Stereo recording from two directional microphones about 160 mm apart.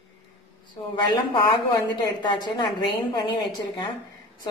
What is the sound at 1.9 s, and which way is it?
A woman's voice, 30° left (ahead or behind).